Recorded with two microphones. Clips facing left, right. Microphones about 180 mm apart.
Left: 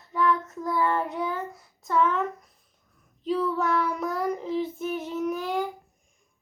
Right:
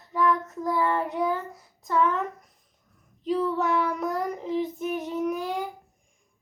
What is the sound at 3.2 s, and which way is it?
Child singing, 15° right (ahead or behind).